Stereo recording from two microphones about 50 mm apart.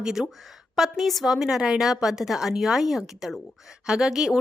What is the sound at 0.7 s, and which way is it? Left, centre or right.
A woman's voice, centre.